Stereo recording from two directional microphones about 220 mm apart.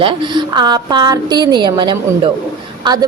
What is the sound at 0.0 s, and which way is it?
A woman's voice, 20° right (ahead or behind).